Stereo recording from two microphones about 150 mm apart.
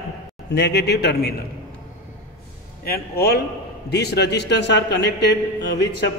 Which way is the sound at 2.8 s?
85° left.